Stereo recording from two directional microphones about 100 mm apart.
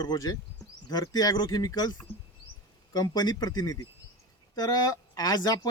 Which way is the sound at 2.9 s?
45° left (ahead or behind).